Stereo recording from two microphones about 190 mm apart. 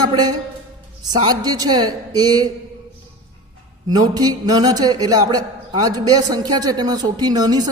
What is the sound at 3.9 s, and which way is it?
A man's voice, 20° right (ahead or behind).